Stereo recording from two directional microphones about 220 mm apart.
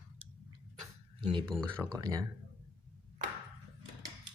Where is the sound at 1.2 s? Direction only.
20° right (ahead or behind).